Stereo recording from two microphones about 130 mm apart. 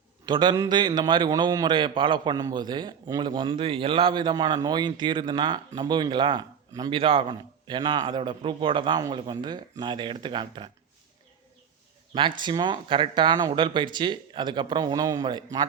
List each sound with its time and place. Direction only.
0.3 s a man's voice: 35° right (ahead or behind)
12.4 s a man's voice: 35° right (ahead or behind)